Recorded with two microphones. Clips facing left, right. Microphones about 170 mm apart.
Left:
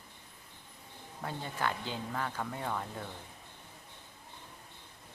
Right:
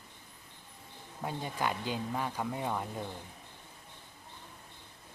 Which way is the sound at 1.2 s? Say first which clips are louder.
Right 2 dB; 15° right (ahead or behind).